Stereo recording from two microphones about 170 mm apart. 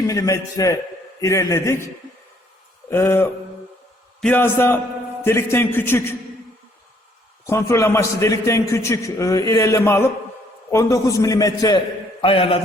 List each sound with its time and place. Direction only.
0.1 s a man's voice: 20° left (ahead or behind)
2.9 s a man's voice: 15° left (ahead or behind)
7.4 s a man's voice: 15° left (ahead or behind)
12.2 s a man's voice: 30° left (ahead or behind)